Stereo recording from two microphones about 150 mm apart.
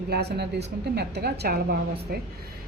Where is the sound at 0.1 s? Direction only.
90° right.